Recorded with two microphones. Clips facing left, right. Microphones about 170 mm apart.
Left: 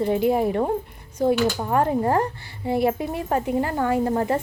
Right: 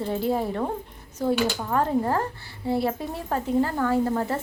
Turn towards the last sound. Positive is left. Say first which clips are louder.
# left 2 dB
turn(degrees=15)  # may be behind; listen again after turning